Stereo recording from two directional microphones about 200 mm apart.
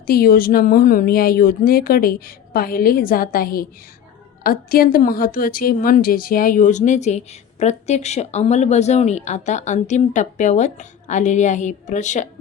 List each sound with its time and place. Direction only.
0.1 s a woman's voice: 50° left (ahead or behind)